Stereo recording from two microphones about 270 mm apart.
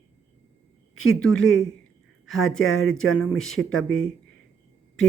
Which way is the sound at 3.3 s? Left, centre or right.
Centre.